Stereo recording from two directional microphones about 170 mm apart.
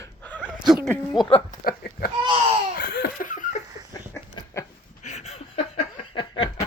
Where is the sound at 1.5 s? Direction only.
60° left (ahead or behind).